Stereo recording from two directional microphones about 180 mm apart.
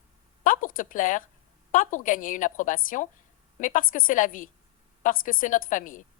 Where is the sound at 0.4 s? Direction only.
50° left (ahead or behind).